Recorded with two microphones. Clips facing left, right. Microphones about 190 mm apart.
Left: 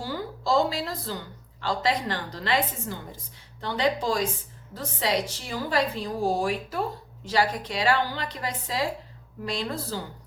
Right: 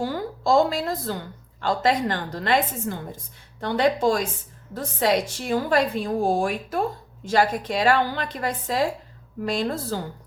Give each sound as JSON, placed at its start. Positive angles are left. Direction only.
{"t": 0.0, "sound": "a woman's voice", "side_deg": -50}